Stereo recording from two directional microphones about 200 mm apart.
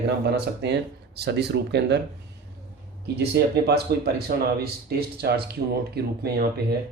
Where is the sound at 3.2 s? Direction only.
55° right (ahead or behind).